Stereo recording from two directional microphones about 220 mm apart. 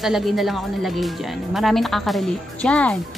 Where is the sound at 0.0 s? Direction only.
Centre (ahead or behind).